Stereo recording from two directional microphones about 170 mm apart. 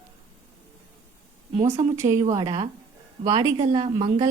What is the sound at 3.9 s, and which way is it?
Speech, 20° right (ahead or behind).